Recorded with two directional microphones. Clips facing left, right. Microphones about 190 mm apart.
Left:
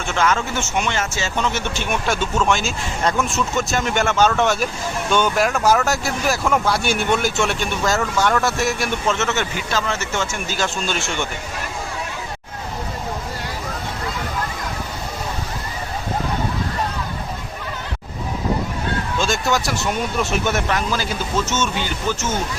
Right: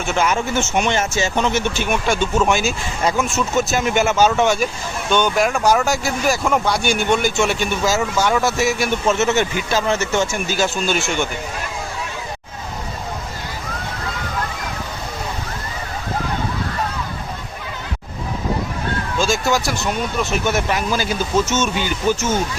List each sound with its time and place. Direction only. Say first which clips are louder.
0.1 s speech: right 1 dB; 10° right (ahead or behind)
19.2 s speech: right 3 dB; centre (ahead or behind)